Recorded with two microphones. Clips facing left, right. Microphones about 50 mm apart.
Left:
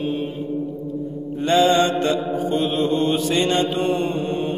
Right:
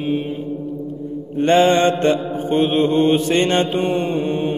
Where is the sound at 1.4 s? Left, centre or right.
Right.